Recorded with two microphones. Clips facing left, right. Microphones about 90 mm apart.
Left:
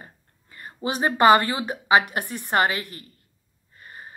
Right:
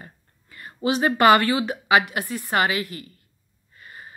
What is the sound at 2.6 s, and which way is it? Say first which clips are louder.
Speech: even; 40° left (ahead or behind).